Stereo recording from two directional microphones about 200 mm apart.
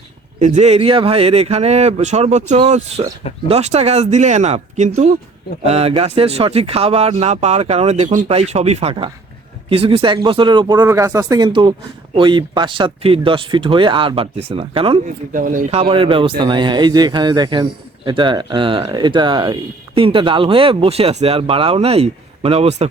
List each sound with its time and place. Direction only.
0.3 s speech: 35° right (ahead or behind)
15.3 s speech: 40° right (ahead or behind)
15.8 s speech: 25° right (ahead or behind)